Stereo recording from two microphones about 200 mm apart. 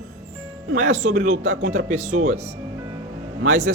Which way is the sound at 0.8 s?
35° right (ahead or behind).